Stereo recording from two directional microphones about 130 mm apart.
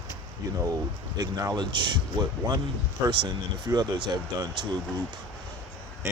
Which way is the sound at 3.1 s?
35° right (ahead or behind).